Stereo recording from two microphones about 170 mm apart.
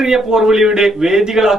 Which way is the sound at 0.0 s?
5° right (ahead or behind).